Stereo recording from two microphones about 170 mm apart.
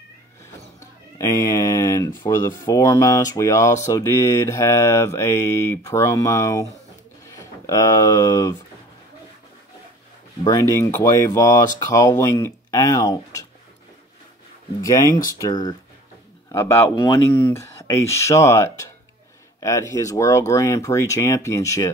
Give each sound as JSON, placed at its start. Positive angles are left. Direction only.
{"t": 1.1, "sound": "speech", "side_deg": 20}
{"t": 10.4, "sound": "speech", "side_deg": 15}
{"t": 14.8, "sound": "speech", "side_deg": 20}
{"t": 17.1, "sound": "speech", "side_deg": 15}